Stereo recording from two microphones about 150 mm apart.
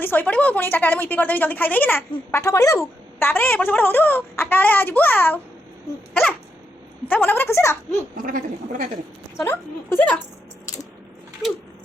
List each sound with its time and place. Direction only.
0.0 s a woman's voice: 10° left (ahead or behind)
7.0 s a woman's voice: 10° left (ahead or behind)
8.2 s speech: 65° right (ahead or behind)
9.4 s a woman's voice: 15° left (ahead or behind)